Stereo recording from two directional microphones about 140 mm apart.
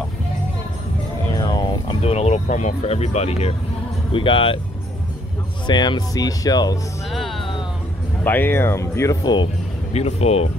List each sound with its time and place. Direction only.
1.3 s music: 30° left (ahead or behind)
2.0 s speech: 50° left (ahead or behind)
5.7 s speech: 30° left (ahead or behind)
7.1 s music: centre (ahead or behind)
8.2 s speech: 15° left (ahead or behind); by 9.5 s 30° left (ahead or behind)
9.9 s speech: 50° left (ahead or behind)